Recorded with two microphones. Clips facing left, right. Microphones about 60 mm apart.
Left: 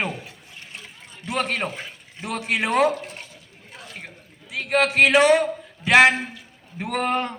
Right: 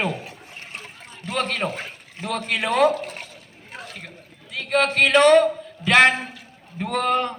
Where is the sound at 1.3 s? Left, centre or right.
Centre.